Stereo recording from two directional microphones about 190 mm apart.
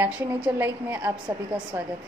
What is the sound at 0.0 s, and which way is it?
A woman's voice, 10° right (ahead or behind).